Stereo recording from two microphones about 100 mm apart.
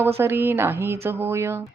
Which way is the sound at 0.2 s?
25° right (ahead or behind).